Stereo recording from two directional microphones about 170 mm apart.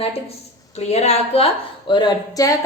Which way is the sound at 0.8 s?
40° left (ahead or behind).